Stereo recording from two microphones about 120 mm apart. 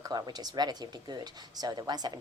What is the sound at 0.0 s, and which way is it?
Speech, 35° right (ahead or behind).